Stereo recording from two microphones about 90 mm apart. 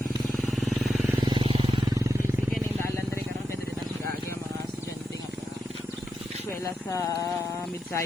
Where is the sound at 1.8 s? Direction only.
40° right (ahead or behind).